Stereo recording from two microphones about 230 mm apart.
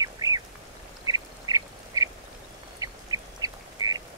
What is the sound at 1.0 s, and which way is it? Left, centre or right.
Duck, centre.